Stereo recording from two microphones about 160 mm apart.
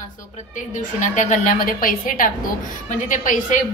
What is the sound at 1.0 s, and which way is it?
A woman's voice, 50° left (ahead or behind).